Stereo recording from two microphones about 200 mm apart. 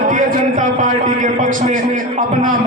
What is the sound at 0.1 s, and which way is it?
A man's voice, 40° right (ahead or behind).